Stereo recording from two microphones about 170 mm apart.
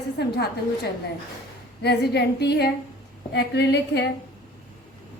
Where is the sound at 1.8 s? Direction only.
75° left (ahead or behind).